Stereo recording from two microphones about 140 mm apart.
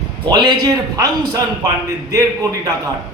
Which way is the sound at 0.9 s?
30° right (ahead or behind).